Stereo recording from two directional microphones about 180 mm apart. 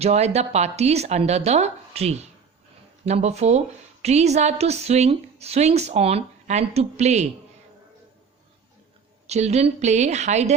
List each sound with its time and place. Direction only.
0.0 s a woman's voice: 35° right (ahead or behind)
9.2 s a woman's voice: 35° right (ahead or behind)